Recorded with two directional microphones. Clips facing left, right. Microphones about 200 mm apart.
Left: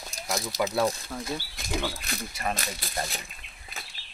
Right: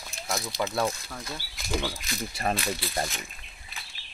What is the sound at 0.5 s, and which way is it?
Speech, 45° left (ahead or behind).